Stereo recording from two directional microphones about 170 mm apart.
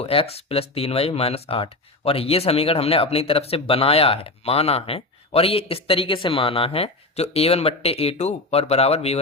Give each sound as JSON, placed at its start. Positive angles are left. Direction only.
{"t": 0.0, "sound": "speech", "side_deg": 35}